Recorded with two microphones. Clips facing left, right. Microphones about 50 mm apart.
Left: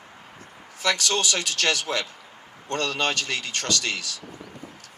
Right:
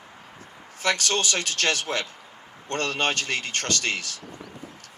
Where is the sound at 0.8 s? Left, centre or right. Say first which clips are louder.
Even; right.